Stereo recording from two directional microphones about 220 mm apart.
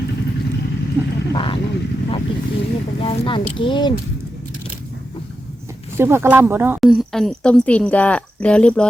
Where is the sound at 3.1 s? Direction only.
25° left (ahead or behind).